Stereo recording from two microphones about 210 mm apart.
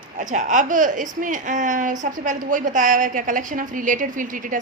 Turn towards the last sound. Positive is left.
turn(degrees=-40)  # may be behind; listen again after turning